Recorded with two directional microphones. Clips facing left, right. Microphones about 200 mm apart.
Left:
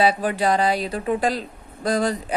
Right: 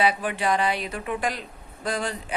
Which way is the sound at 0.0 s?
35° left (ahead or behind).